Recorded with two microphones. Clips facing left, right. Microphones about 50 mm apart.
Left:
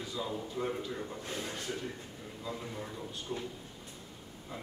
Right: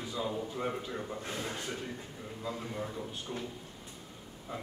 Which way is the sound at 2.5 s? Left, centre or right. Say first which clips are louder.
Right 2 dB; centre.